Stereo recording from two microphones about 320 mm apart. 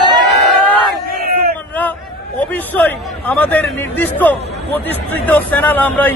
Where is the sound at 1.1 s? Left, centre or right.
Right.